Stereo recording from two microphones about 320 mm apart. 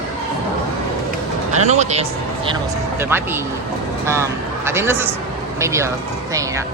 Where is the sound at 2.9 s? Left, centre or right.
Centre.